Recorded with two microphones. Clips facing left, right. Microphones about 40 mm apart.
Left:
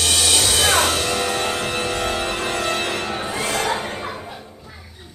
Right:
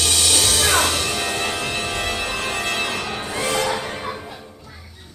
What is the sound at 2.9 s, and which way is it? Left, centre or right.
Music, left.